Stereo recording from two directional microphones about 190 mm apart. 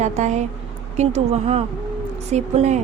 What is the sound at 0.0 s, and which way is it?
A woman's voice, 40° right (ahead or behind).